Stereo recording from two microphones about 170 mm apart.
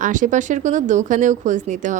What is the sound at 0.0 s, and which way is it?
A woman's voice, 50° right (ahead or behind).